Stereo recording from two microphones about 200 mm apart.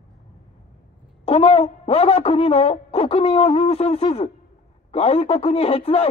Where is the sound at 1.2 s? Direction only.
30° left (ahead or behind).